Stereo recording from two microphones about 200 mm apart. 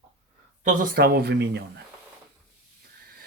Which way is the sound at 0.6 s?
45° right (ahead or behind).